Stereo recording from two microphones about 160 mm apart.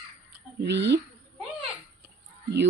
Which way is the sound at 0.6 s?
90° right.